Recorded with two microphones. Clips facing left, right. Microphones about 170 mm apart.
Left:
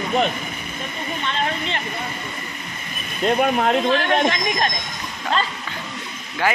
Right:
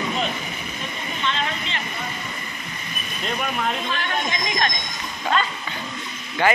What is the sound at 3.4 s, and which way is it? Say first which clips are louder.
Speech: left 7 dB; 55° left (ahead or behind).